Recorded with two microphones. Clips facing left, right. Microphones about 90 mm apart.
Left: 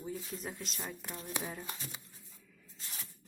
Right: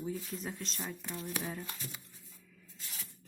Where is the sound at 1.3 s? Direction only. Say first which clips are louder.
Even; 20° left (ahead or behind).